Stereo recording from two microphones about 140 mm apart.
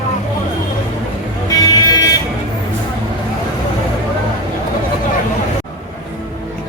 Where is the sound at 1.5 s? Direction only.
25° left (ahead or behind).